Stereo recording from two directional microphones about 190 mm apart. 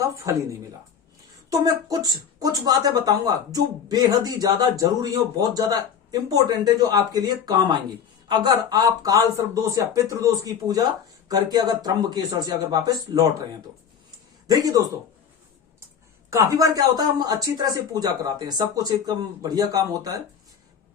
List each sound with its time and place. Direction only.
0.0 s speech: 15° right (ahead or behind)
1.5 s speech: 20° right (ahead or behind)
14.4 s speech: 20° right (ahead or behind)
16.3 s speech: 15° right (ahead or behind)